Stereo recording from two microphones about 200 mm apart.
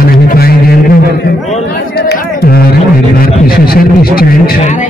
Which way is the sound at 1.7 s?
55° left (ahead or behind).